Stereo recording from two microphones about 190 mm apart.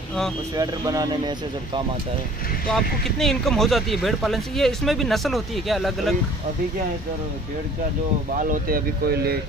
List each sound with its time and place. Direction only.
0.6 s speech: 20° right (ahead or behind)
2.7 s speech: centre (ahead or behind)
8.4 s speech: 45° right (ahead or behind)